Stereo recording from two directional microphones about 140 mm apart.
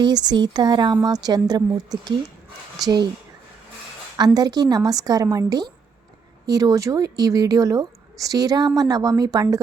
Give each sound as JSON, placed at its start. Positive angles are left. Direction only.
{"t": 0.0, "sound": "speech", "side_deg": -30}
{"t": 4.4, "sound": "speech", "side_deg": -30}